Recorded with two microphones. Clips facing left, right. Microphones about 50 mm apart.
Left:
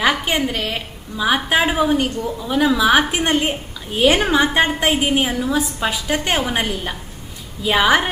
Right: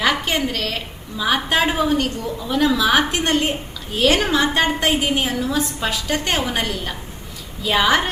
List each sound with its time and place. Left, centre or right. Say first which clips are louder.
0.0 s a woman's voice: left 1 dB; centre